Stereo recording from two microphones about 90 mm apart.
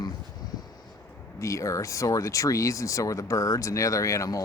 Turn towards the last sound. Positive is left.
turn(degrees=35)  # may be behind; listen again after turning